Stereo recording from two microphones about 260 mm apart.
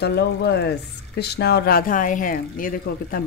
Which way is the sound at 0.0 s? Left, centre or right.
Left.